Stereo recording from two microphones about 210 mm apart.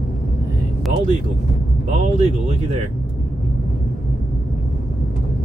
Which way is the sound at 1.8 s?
30° right (ahead or behind).